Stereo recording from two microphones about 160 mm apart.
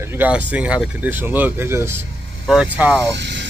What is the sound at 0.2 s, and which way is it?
Speech, 10° right (ahead or behind).